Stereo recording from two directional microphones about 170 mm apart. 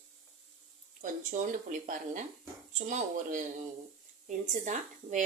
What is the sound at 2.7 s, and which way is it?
Speech, 45° right (ahead or behind).